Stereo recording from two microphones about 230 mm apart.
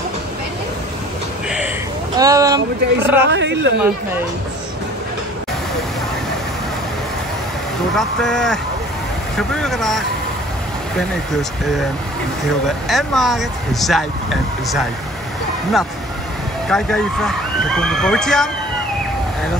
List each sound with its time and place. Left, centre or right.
2.1 s speech: centre
3.3 s speech: right
7.9 s speech: centre
12.6 s speech: centre
16.6 s speech: centre